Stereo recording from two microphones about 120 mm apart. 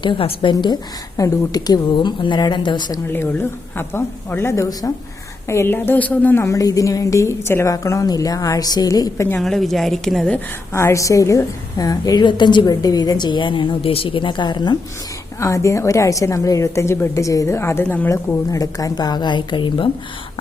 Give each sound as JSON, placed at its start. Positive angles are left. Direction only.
{"t": 0.0, "sound": "a woman's voice", "side_deg": 45}
{"t": 0.5, "sound": "a woman's voice", "side_deg": 35}
{"t": 3.1, "sound": "a woman's voice", "side_deg": 15}
{"t": 9.4, "sound": "a woman's voice", "side_deg": 0}
{"t": 10.7, "sound": "a woman's voice", "side_deg": 25}
{"t": 15.4, "sound": "a woman's voice", "side_deg": 25}
{"t": 18.1, "sound": "a woman's voice", "side_deg": 25}